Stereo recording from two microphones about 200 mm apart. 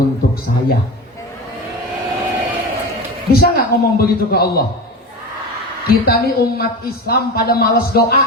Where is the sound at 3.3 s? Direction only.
50° left (ahead or behind).